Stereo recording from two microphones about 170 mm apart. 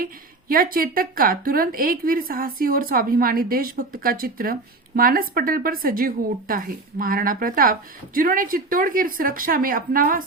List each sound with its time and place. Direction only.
0.0 s a woman's voice: 55° right (ahead or behind)